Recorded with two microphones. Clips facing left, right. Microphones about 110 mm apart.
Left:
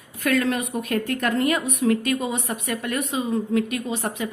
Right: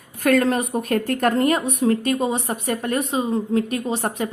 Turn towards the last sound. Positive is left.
turn(degrees=-40)  # may be behind; listen again after turning